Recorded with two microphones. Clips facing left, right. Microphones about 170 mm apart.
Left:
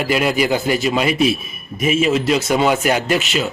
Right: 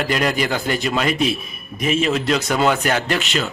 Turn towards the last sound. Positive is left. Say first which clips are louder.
# left 3 dB
turn(degrees=5)  # may be behind; listen again after turning